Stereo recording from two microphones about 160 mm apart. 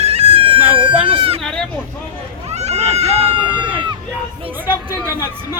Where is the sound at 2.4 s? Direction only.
45° right (ahead or behind).